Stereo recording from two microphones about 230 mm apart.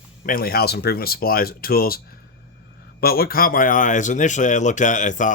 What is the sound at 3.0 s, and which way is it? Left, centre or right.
Speech, left.